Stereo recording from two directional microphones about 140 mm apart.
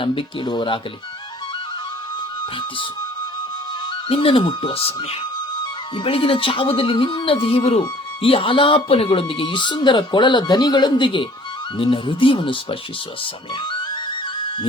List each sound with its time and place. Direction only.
0.0 s speech: 40° left (ahead or behind)
4.1 s speech: 40° left (ahead or behind)
6.0 s speech: 40° left (ahead or behind)